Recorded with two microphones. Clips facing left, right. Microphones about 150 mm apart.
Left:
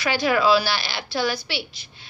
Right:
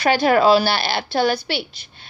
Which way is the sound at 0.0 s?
55° right (ahead or behind).